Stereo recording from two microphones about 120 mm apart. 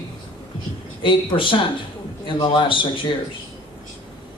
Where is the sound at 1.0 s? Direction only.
45° left (ahead or behind).